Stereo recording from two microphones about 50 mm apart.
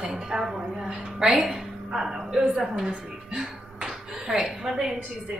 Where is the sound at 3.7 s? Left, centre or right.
Centre.